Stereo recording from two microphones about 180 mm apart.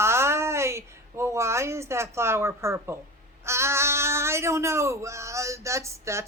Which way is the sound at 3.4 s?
15° right (ahead or behind).